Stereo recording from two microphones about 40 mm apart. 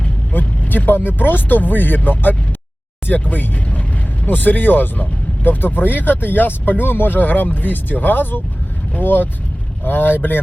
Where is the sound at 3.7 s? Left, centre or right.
Left.